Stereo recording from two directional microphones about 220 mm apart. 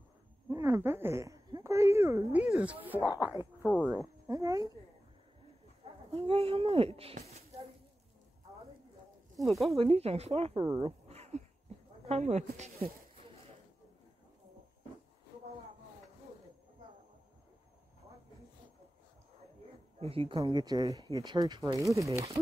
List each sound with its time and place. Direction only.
0.5 s speech: 15° right (ahead or behind)
4.3 s speech: 15° right (ahead or behind)
6.1 s speech: 25° right (ahead or behind)
9.4 s speech: centre (ahead or behind)
9.8 s speech: 25° right (ahead or behind)
10.8 s a sound: 30° right (ahead or behind)
12.1 s speech: 30° right (ahead or behind)
20.0 s speech: 25° right (ahead or behind)